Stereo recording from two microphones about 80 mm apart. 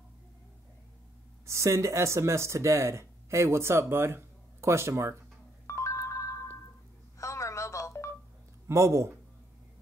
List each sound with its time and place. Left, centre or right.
1.4 s speech: right
5.7 s telephone bell ringing: left
7.2 s telephone: left
8.6 s a man's voice: right